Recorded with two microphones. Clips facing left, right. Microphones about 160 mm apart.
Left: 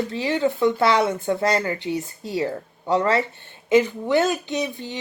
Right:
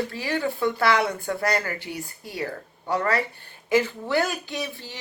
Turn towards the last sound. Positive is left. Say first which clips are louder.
# left 6 dB
turn(degrees=20)  # may be behind; listen again after turning